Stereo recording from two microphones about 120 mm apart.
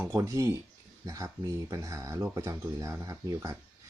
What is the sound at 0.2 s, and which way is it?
Speech, 25° right (ahead or behind).